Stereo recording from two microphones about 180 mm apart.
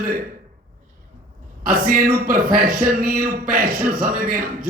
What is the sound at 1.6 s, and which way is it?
Speech, 50° right (ahead or behind).